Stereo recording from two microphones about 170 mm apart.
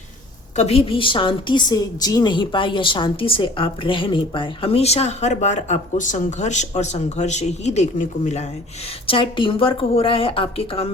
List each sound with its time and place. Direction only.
0.5 s a woman's voice: 40° left (ahead or behind)
9.0 s a woman's voice: 30° left (ahead or behind)